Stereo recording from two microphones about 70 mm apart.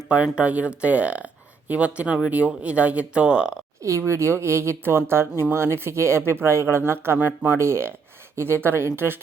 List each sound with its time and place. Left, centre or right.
0.1 s speech: centre
3.8 s speech: right